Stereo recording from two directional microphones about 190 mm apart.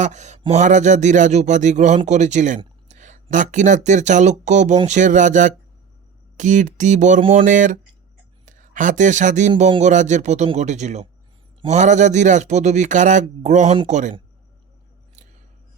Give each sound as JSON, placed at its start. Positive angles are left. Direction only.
{"t": 0.0, "sound": "speech", "side_deg": -40}
{"t": 7.4, "sound": "speech", "side_deg": -45}